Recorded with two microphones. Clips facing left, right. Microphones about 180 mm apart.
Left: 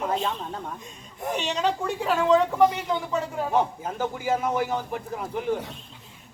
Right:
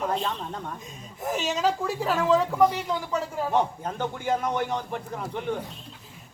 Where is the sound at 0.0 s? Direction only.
Centre (ahead or behind).